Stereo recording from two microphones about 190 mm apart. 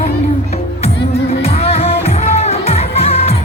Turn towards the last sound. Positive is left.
turn(degrees=30)  # may be behind; listen again after turning